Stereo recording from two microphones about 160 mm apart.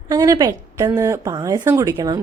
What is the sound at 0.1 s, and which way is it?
A woman's voice, 25° right (ahead or behind).